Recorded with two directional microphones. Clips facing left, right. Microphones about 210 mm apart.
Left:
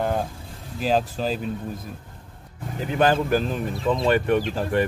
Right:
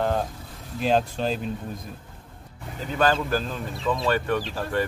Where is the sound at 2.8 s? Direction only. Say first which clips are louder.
Left 3 dB; 15° left (ahead or behind).